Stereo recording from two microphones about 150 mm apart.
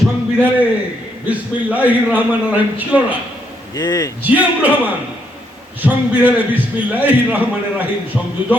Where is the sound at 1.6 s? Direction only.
10° right (ahead or behind).